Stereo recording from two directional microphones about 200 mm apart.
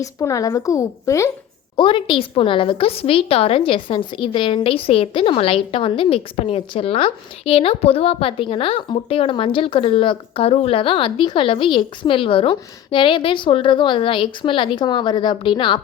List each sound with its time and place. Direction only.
0.0 s a woman's voice: 15° left (ahead or behind)
1.7 s a woman's voice: 25° left (ahead or behind)